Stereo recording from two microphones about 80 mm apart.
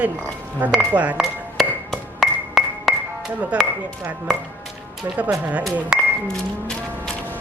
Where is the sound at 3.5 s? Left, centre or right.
Centre.